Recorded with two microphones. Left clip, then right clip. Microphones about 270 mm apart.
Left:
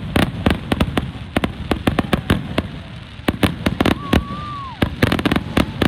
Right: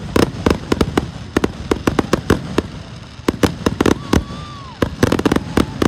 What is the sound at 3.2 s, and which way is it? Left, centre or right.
Fireworks, centre.